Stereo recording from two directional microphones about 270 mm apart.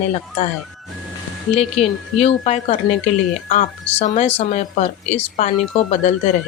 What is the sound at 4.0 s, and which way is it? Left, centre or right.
Speech, left.